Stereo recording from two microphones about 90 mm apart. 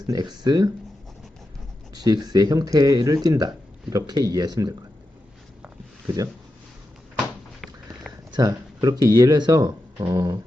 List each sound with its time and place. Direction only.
0.1 s speech: 50° right (ahead or behind)
1.9 s speech: 45° right (ahead or behind)
7.6 s a sound: centre (ahead or behind)
8.3 s speech: 45° right (ahead or behind)